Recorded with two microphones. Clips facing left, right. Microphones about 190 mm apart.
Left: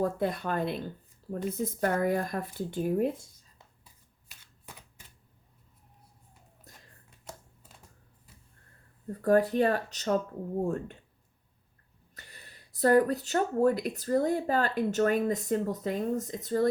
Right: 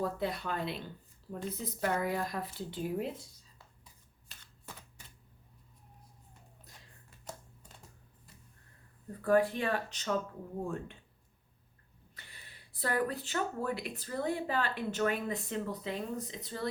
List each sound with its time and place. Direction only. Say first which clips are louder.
0.0 s speech: left 5 dB; 50° left (ahead or behind)
6.7 s a sound: left 5 dB; 50° left (ahead or behind)
9.2 s speech: left 5 dB; 40° left (ahead or behind)
12.1 s speech: left 4 dB; 45° left (ahead or behind)